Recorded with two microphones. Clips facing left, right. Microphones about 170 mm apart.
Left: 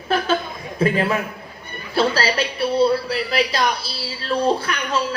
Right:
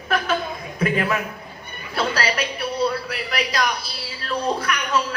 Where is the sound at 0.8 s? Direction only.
30° left (ahead or behind).